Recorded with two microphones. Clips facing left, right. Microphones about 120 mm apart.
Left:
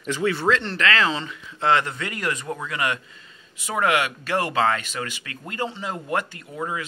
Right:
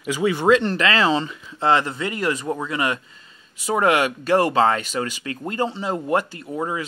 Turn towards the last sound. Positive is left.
turn(degrees=-30)  # may be behind; listen again after turning